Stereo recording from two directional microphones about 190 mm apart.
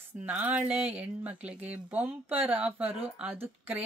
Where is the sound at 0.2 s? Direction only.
10° right (ahead or behind).